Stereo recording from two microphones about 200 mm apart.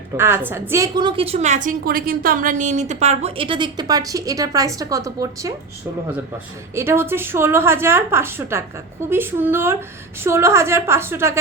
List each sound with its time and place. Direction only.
0.2 s a woman's voice: 10° right (ahead or behind)
6.7 s a woman's voice: 10° right (ahead or behind)